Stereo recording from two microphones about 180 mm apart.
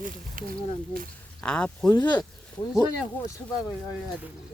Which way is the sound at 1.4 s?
5° left (ahead or behind).